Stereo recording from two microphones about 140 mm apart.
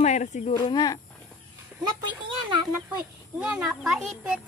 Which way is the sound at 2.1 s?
35° right (ahead or behind).